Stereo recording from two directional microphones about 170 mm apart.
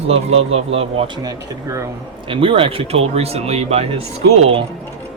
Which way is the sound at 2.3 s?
30° right (ahead or behind).